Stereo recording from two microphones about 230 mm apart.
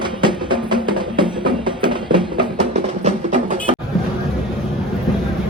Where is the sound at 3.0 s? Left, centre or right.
Right.